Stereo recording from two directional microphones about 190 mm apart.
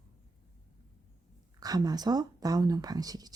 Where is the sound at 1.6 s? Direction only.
20° right (ahead or behind).